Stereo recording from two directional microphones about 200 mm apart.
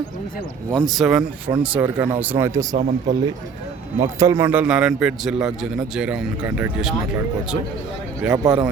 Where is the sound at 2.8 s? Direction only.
35° right (ahead or behind).